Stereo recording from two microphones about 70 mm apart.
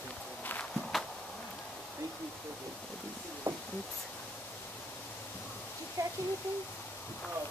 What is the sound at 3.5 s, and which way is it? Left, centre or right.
Speech, right.